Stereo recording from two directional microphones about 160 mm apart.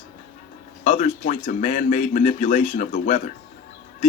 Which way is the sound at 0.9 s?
50° left (ahead or behind).